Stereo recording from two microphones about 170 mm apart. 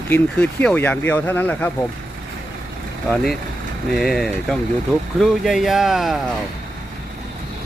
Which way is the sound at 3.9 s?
Centre (ahead or behind).